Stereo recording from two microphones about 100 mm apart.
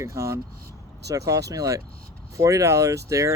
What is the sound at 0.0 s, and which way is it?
Speech, 30° right (ahead or behind).